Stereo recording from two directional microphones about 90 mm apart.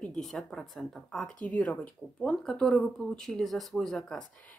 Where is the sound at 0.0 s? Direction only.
5° left (ahead or behind).